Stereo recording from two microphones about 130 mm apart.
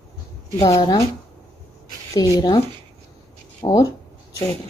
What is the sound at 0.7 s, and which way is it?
Speech, 30° left (ahead or behind).